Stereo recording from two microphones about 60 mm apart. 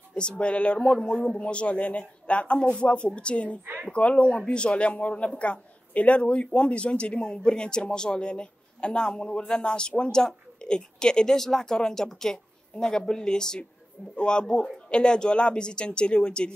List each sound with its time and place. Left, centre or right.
0.1 s a man's voice: centre